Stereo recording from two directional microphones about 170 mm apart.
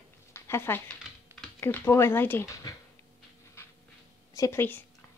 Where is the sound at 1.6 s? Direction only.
15° left (ahead or behind).